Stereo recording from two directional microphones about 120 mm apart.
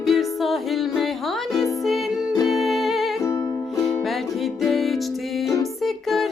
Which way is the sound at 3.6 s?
Centre (ahead or behind).